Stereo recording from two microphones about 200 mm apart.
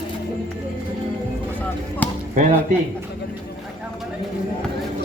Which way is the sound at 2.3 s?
40° right (ahead or behind).